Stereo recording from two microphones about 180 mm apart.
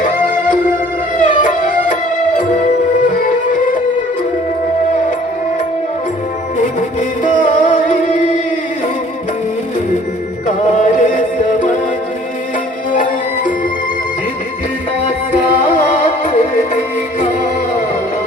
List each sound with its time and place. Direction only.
1.2 s music: 45° left (ahead or behind)
7.3 s music: 45° left (ahead or behind)
10.4 s music: 45° left (ahead or behind)
12.9 s music: 45° left (ahead or behind)
15.7 s music: 40° left (ahead or behind)